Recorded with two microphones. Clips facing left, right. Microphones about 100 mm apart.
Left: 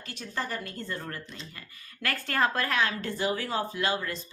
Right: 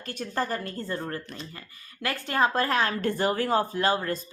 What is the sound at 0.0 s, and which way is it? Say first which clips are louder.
Speech: right 5 dB; 50° right (ahead or behind).